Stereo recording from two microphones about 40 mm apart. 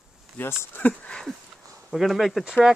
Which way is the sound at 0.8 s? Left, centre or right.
Left.